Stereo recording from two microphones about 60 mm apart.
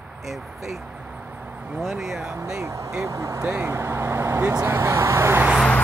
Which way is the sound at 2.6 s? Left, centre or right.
Right.